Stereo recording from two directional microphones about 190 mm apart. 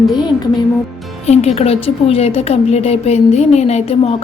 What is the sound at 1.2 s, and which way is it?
A woman's voice, 35° left (ahead or behind).